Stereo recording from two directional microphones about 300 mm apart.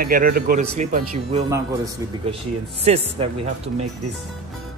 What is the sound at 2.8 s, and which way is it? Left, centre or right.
Speech, right.